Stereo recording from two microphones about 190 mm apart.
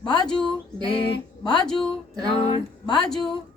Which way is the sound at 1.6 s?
5° left (ahead or behind).